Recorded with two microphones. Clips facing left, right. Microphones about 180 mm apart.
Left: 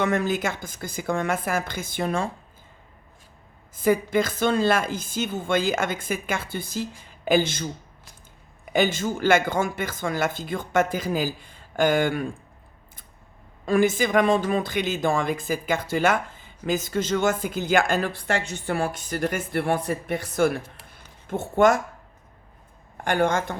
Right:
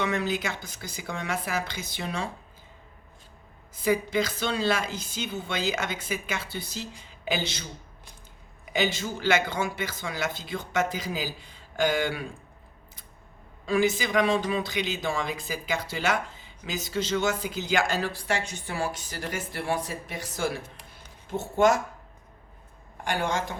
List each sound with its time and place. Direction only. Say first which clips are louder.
0.0 s speech: left 4 dB; 50° left (ahead or behind)
3.8 s speech: left 4 dB; 50° left (ahead or behind)
13.7 s speech: left 4 dB; 50° left (ahead or behind)
23.0 s speech: left 6 dB; 50° left (ahead or behind)